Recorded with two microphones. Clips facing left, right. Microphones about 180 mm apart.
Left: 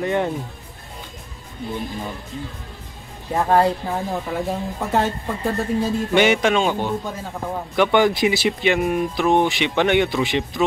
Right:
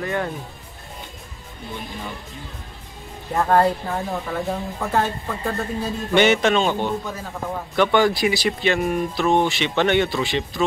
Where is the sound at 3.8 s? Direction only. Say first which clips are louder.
Left 1 dB; 15° left (ahead or behind).